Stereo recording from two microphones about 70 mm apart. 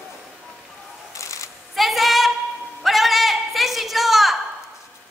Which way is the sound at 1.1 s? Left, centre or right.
Left.